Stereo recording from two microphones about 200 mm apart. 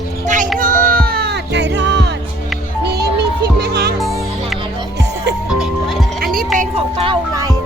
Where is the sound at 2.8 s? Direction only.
55° right (ahead or behind).